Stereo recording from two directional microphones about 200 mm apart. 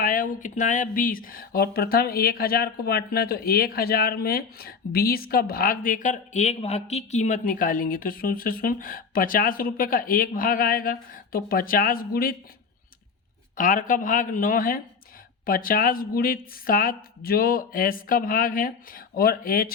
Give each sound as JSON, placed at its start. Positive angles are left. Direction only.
{"t": 0.0, "sound": "speech", "side_deg": 40}
{"t": 13.6, "sound": "speech", "side_deg": 40}